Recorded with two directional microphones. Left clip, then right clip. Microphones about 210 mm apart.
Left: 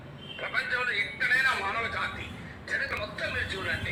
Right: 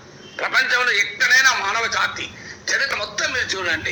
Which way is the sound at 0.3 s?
45° right (ahead or behind).